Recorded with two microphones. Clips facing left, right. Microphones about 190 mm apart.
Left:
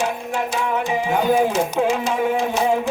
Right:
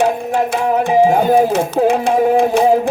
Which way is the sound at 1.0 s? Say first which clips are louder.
Right 4 dB; 40° right (ahead or behind).